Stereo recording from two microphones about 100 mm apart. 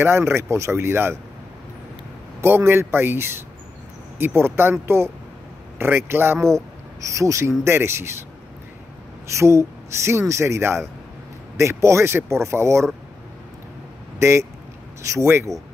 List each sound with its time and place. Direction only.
0.0 s speech: 25° right (ahead or behind)
2.4 s speech: 25° right (ahead or behind)
9.4 s speech: 30° right (ahead or behind)
15.0 s speech: 30° right (ahead or behind)